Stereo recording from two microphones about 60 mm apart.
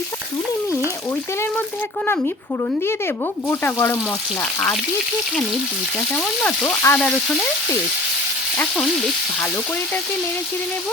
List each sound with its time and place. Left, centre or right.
3.5 s frying: left
6.7 s frying: left